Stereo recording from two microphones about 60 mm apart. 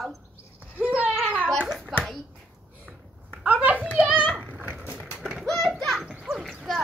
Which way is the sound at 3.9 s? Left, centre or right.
Right.